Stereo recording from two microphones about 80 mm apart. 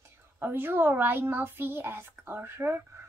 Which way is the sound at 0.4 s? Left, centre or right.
Right.